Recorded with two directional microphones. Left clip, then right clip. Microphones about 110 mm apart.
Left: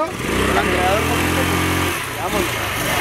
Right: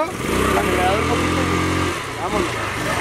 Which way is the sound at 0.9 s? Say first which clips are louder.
Left 1 dB; 15° left (ahead or behind).